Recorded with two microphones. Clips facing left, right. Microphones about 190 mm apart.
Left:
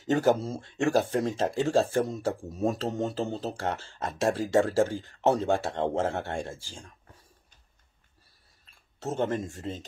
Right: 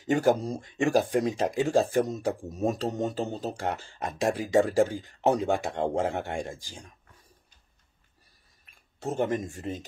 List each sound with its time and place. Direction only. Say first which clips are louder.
0.0 s speech: even; 10° right (ahead or behind)
8.6 s speech: right 1 dB; 15° right (ahead or behind)